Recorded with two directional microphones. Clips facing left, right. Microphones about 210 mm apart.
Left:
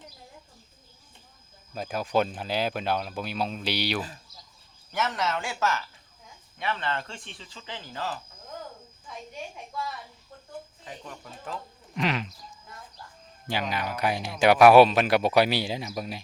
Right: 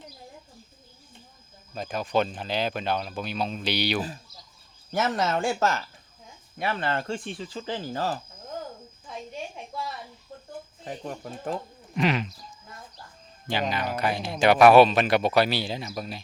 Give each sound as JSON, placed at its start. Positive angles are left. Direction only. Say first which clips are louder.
{"t": 1.7, "sound": "speech", "louder": "even", "side_deg": 5}
{"t": 5.1, "sound": "speech", "louder": "right 5 dB", "side_deg": -45}
{"t": 10.8, "sound": "speech", "louder": "right 7 dB", "side_deg": -45}
{"t": 11.9, "sound": "speech", "louder": "right 3 dB", "side_deg": -5}
{"t": 13.5, "sound": "speech", "louder": "right 2 dB", "side_deg": 10}